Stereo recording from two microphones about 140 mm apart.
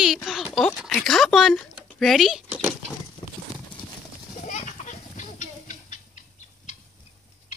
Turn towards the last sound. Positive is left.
turn(degrees=60)  # may be behind; listen again after turning